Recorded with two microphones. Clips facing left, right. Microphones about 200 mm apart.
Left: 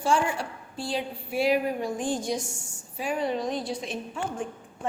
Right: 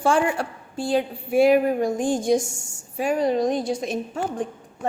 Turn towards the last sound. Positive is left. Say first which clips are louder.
# right 6 dB
turn(degrees=-40)  # may be behind; listen again after turning